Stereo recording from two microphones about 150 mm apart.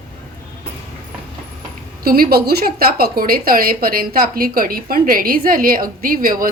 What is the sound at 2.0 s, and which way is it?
Speech, 85° right.